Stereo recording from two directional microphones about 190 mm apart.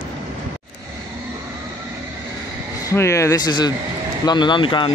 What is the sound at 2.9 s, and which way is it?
Speech, 15° left (ahead or behind).